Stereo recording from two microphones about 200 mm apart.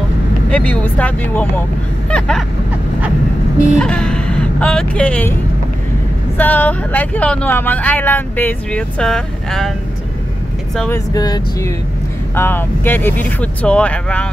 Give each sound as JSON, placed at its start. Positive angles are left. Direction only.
{"t": 0.5, "sound": "speech", "side_deg": 5}
{"t": 3.7, "sound": "speech", "side_deg": 5}
{"t": 6.3, "sound": "speech", "side_deg": 10}
{"t": 11.1, "sound": "speech", "side_deg": 20}